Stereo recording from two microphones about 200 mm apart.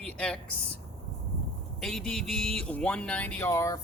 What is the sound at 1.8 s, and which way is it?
Speech, centre (ahead or behind).